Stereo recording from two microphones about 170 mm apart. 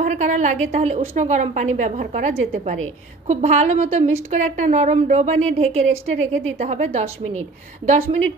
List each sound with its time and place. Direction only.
0.0 s a woman's voice: 45° right (ahead or behind)